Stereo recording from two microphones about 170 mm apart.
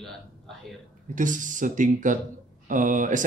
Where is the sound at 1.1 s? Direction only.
50° right (ahead or behind).